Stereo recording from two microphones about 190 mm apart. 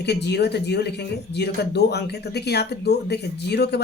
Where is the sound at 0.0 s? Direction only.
60° left (ahead or behind).